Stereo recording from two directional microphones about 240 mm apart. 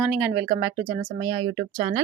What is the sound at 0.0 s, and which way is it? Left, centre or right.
Speech, centre.